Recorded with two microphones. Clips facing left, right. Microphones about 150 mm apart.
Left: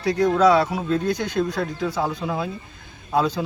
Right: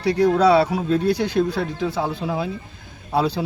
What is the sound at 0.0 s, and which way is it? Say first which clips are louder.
A man's voice: right 1 dB; 30° right (ahead or behind).